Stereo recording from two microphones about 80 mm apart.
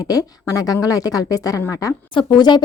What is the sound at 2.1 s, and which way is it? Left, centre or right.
Speech, left.